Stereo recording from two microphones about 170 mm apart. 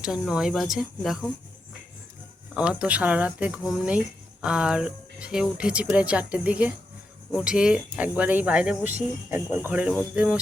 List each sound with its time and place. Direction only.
0.0 s speech: 5° right (ahead or behind)
2.6 s speech: 5° right (ahead or behind)